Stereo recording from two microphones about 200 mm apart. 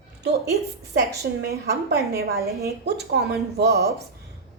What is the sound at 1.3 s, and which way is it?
A woman's voice, 55° right (ahead or behind).